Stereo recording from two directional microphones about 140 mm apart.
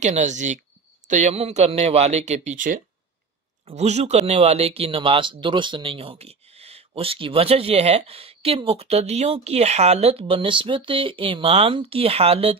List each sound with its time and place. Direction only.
0.0 s speech: 55° right (ahead or behind)
3.6 s speech: 55° right (ahead or behind)